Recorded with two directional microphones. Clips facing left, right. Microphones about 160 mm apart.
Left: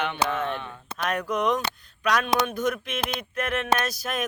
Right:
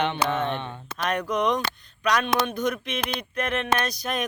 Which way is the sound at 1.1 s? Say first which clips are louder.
Right 1 dB; 5° left (ahead or behind).